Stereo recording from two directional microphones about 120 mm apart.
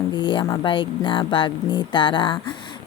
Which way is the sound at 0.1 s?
40° left (ahead or behind).